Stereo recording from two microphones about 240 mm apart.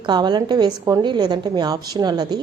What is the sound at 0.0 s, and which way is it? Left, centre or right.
A woman's voice, centre.